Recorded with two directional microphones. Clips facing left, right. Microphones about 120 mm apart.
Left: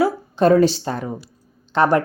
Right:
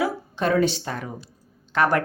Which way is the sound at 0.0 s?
35° left (ahead or behind).